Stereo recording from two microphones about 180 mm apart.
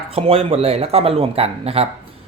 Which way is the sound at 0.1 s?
35° right (ahead or behind).